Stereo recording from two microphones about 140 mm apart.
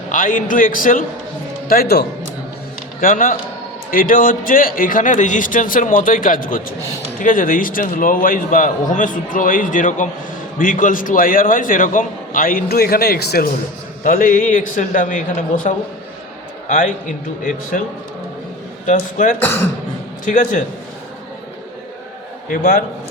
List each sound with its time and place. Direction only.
0.1 s a man's voice: 70° left (ahead or behind)
1.6 s a man's voice: 90° left
3.0 s a man's voice: 80° left
14.0 s a man's voice: 75° left (ahead or behind)
18.9 s speech: 65° left (ahead or behind)
19.4 s speech: 15° left (ahead or behind)
20.2 s speech: 65° left (ahead or behind)
22.4 s a man's voice: 80° left